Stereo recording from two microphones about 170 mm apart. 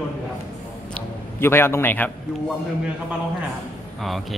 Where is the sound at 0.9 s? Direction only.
15° left (ahead or behind).